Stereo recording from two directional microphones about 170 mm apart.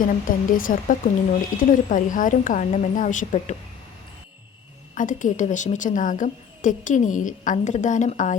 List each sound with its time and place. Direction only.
0.0 s a woman's voice: 55° left (ahead or behind)
4.9 s a woman's voice: 50° left (ahead or behind)